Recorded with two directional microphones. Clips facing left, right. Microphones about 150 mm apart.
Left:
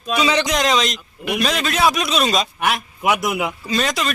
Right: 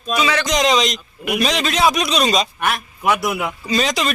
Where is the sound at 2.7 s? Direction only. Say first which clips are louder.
Left 1 dB; 10° left (ahead or behind).